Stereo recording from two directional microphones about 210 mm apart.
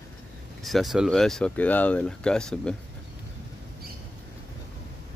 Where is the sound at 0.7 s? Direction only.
Centre (ahead or behind).